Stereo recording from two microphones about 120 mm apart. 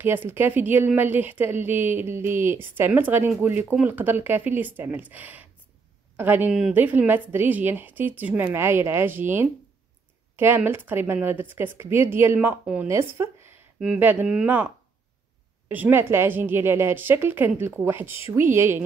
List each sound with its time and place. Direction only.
0.0 s a woman's voice: 15° right (ahead or behind)
10.3 s a woman's voice: 15° right (ahead or behind)
15.7 s a woman's voice: 15° right (ahead or behind)